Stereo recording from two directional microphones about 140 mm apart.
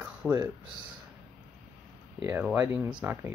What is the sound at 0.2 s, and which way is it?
Speech, 5° right (ahead or behind).